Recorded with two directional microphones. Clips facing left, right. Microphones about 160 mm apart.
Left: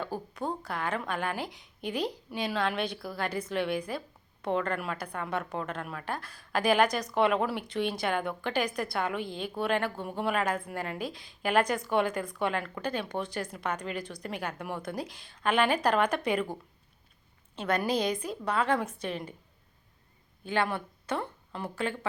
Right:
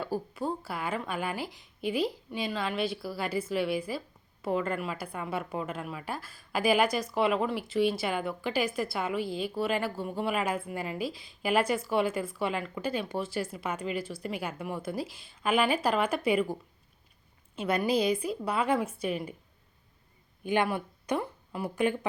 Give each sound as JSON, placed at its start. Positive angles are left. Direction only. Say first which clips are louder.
{"t": 0.0, "sound": "a woman's voice", "louder": "right 2 dB", "side_deg": -5}
{"t": 17.5, "sound": "a woman's voice", "louder": "right 1 dB", "side_deg": -10}
{"t": 20.4, "sound": "speech", "louder": "right 2 dB", "side_deg": -15}